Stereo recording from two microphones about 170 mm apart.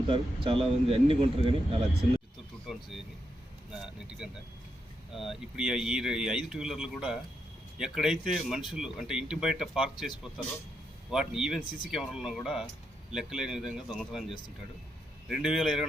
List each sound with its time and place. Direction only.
0.1 s speech: 30° right (ahead or behind)
2.7 s vehicle: 5° right (ahead or behind)
3.7 s speech: 5° right (ahead or behind)
11.1 s speech: 5° right (ahead or behind)